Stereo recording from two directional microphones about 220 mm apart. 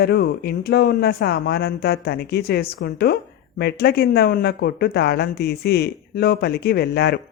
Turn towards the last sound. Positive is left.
turn(degrees=45)  # may be behind; listen again after turning